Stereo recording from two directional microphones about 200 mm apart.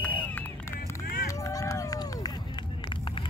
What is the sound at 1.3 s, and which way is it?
Run, 15° left (ahead or behind).